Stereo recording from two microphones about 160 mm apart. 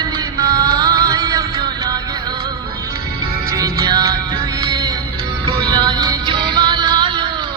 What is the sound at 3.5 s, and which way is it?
Music, 25° right (ahead or behind).